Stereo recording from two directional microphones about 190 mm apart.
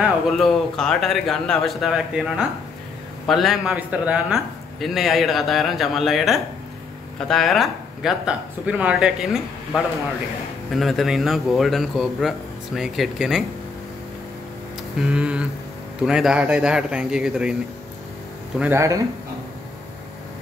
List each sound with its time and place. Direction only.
0.0 s a man's voice: centre (ahead or behind)
15.0 s a man's voice: 5° right (ahead or behind)
18.6 s speech: 15° right (ahead or behind)